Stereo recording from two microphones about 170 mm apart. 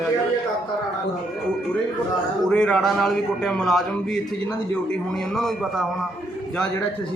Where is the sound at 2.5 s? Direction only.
5° left (ahead or behind).